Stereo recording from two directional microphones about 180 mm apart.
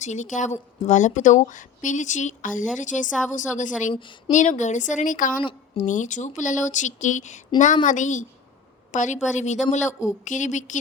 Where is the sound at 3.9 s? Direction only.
25° left (ahead or behind).